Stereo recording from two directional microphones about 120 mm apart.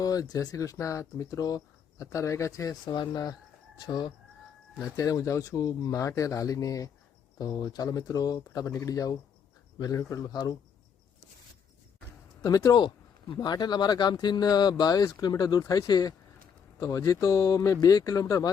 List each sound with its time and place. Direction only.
0.0 s speech: 30° left (ahead or behind)
2.8 s speech: 40° left (ahead or behind)
12.4 s speech: 30° left (ahead or behind)